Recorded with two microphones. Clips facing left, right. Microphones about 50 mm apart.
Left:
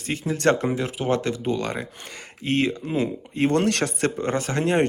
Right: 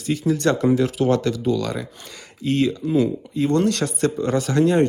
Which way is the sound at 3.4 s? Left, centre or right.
Left.